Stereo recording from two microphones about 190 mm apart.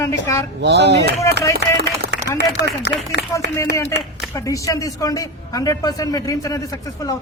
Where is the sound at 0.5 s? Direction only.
65° right (ahead or behind).